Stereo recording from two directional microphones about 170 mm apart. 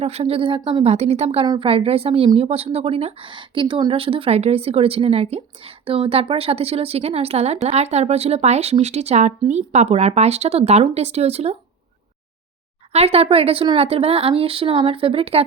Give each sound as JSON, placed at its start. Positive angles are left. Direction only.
{"t": 0.0, "sound": "a woman's voice", "side_deg": -35}
{"t": 12.9, "sound": "a woman's voice", "side_deg": -35}